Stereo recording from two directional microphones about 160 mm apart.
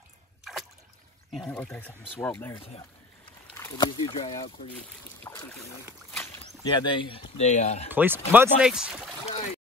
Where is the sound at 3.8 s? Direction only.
30° left (ahead or behind).